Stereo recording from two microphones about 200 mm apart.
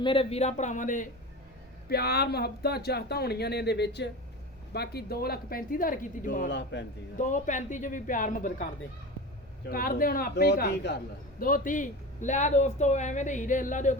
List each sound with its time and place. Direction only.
0.0 s a man's voice: 25° left (ahead or behind)
1.9 s speech: 50° left (ahead or behind)
6.5 s a man's voice: 60° left (ahead or behind)
7.2 s a man's voice: 40° left (ahead or behind)